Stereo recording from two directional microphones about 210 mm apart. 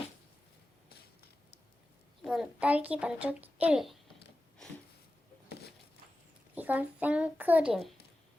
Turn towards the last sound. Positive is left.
turn(degrees=0)  # may be behind; listen again after turning